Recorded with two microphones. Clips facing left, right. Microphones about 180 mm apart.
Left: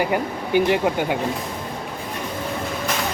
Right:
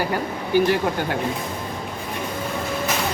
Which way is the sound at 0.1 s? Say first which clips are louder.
Left 1 dB; 20° left (ahead or behind).